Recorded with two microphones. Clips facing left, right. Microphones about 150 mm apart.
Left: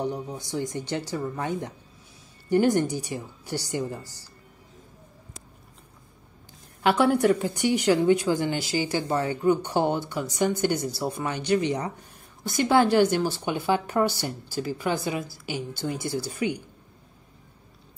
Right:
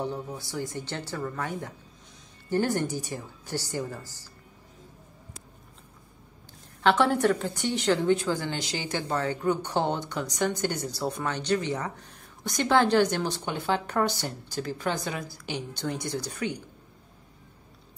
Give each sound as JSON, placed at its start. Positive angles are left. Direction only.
{"t": 0.0, "sound": "speech", "side_deg": 15}
{"t": 6.8, "sound": "a woman's voice", "side_deg": 10}